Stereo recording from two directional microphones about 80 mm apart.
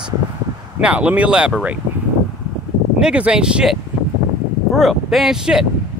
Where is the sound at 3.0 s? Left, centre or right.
Centre.